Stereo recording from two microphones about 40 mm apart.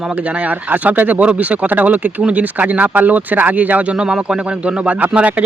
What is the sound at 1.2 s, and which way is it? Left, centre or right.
Speech, right.